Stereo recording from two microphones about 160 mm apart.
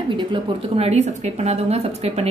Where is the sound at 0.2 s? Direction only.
35° right (ahead or behind).